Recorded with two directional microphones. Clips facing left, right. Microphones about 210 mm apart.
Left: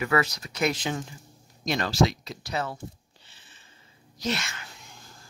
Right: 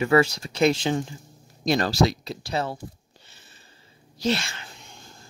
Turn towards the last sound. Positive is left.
turn(degrees=-30)  # may be behind; listen again after turning